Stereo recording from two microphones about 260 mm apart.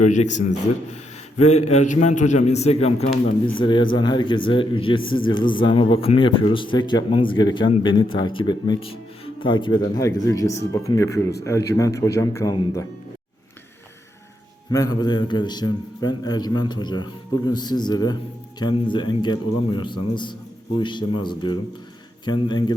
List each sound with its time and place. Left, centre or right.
0.0 s a man's voice: left; by 12.8 s centre
14.7 s a man's voice: centre